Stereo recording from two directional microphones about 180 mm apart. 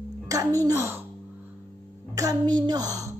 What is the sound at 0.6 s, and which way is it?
Speech, 15° right (ahead or behind).